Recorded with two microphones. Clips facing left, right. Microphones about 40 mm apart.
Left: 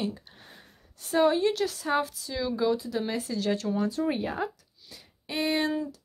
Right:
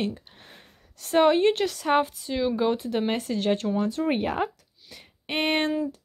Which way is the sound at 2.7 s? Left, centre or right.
Right.